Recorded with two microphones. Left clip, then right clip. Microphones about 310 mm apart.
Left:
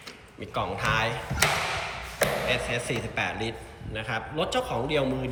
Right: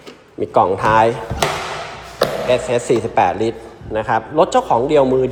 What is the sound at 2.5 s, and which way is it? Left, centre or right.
A man's voice, right.